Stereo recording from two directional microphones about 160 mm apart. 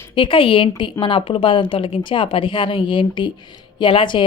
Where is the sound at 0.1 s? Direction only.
30° left (ahead or behind).